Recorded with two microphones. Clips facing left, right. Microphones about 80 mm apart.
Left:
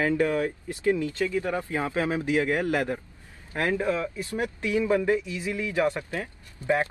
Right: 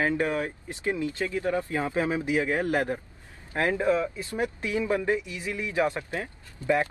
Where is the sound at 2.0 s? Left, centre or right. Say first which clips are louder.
Left 2 dB; centre.